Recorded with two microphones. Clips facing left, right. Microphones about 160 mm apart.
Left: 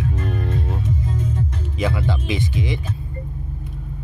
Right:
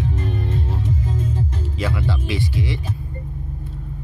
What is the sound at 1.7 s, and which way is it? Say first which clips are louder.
Speech: left 2 dB; 20° left (ahead or behind).